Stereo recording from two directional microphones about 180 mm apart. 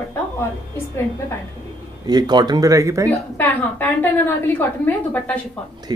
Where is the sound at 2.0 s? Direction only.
25° right (ahead or behind).